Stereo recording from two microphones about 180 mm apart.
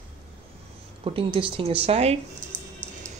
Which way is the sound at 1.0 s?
30° right (ahead or behind).